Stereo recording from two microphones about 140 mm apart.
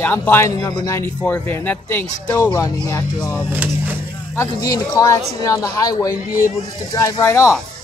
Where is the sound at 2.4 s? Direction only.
25° left (ahead or behind).